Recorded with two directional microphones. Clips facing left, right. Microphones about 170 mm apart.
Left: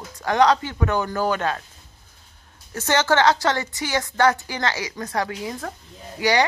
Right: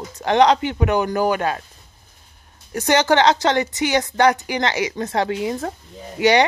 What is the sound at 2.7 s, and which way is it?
A woman's voice, 15° right (ahead or behind).